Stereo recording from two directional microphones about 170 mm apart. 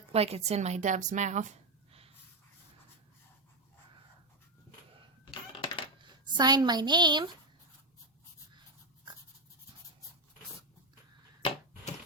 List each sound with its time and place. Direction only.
0.1 s speech: 35° right (ahead or behind)
5.2 s typewriter: 30° left (ahead or behind)
6.0 s speech: 25° right (ahead or behind)